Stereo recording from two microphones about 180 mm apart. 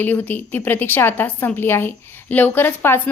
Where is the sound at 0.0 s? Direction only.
10° left (ahead or behind).